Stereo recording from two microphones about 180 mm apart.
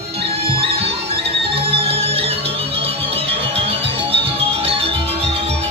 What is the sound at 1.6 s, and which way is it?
Music, 30° right (ahead or behind).